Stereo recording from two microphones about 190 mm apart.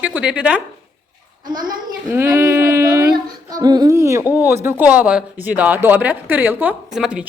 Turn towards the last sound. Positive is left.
turn(degrees=-5)  # may be behind; listen again after turning